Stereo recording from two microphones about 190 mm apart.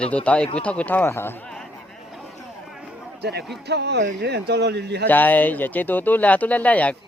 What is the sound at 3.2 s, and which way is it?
Speech, 60° right (ahead or behind).